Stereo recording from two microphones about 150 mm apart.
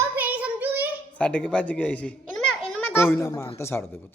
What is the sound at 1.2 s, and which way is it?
A child's voice, 10° left (ahead or behind).